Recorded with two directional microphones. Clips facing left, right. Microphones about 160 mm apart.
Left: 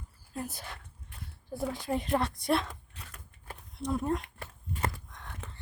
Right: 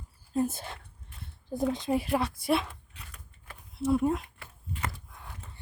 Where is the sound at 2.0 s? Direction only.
5° right (ahead or behind).